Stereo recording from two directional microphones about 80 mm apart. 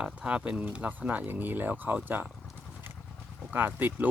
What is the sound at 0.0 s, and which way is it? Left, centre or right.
Speech, centre.